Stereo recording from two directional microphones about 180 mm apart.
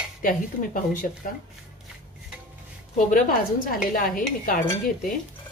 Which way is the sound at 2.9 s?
50° left (ahead or behind).